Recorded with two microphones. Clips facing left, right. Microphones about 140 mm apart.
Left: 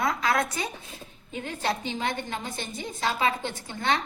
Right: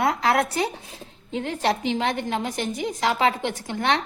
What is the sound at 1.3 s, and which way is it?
A woman's voice, 90° right.